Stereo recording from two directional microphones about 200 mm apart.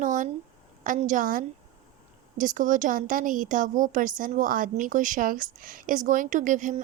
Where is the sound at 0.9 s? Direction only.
40° right (ahead or behind).